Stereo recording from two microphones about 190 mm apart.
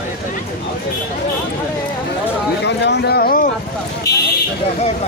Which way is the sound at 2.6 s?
65° left (ahead or behind).